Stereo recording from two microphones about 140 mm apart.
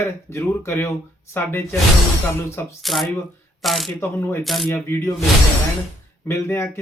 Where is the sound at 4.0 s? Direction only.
15° left (ahead or behind).